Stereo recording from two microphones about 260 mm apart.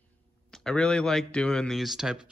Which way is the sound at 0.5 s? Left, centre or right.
Centre.